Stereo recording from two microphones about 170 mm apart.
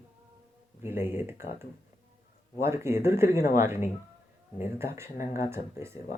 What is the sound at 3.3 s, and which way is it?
Speech, 60° left (ahead or behind).